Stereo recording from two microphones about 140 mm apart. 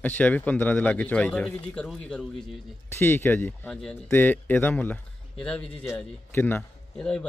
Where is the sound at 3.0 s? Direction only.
15° left (ahead or behind).